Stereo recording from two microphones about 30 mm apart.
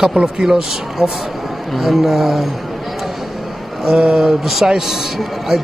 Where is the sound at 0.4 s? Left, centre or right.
Centre.